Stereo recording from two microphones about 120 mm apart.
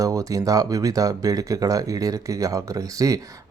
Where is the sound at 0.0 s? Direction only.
30° right (ahead or behind).